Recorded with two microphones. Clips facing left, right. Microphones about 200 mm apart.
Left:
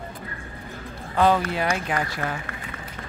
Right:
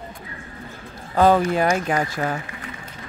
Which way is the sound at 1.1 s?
40° right (ahead or behind).